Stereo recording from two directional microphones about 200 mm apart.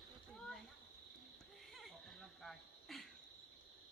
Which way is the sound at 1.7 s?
Centre (ahead or behind).